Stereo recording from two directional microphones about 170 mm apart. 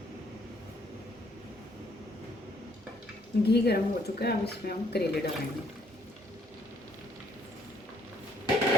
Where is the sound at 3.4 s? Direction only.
75° left (ahead or behind).